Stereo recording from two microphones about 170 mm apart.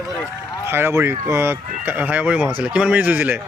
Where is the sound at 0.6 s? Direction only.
15° right (ahead or behind).